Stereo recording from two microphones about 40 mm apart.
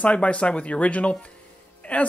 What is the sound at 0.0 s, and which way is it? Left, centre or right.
Speech, left.